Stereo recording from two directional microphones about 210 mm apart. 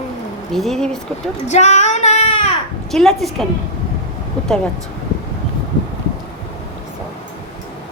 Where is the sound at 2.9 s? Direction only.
Centre (ahead or behind).